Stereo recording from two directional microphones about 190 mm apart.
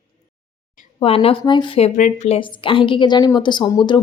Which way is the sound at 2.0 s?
40° left (ahead or behind).